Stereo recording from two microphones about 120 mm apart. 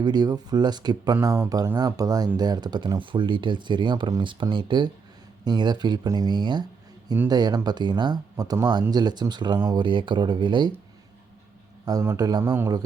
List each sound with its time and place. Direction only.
0.0 s speech: 35° right (ahead or behind)
11.9 s speech: 30° right (ahead or behind)